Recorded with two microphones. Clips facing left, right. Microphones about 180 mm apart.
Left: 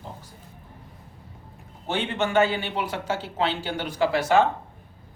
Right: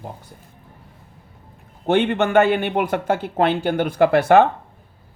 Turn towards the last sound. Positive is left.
turn(degrees=-60)  # may be behind; listen again after turning